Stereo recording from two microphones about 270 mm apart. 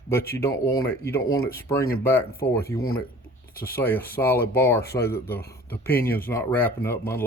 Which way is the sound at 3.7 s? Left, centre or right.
Centre.